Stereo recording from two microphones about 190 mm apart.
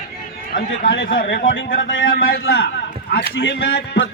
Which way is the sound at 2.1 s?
55° left (ahead or behind).